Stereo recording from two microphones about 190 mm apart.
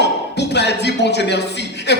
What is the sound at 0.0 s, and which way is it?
Speech, 65° left (ahead or behind).